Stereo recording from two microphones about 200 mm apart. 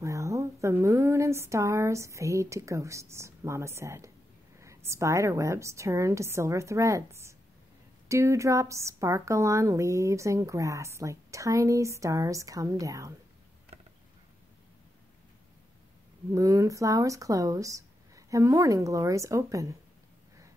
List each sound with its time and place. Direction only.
0.0 s a woman's voice: 15° right (ahead or behind)
16.3 s a woman's voice: 15° right (ahead or behind)